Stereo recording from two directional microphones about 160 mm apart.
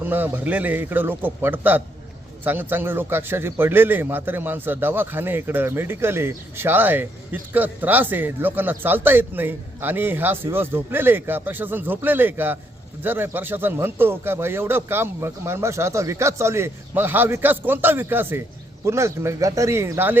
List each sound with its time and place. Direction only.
0.0 s a man's voice: 10° right (ahead or behind)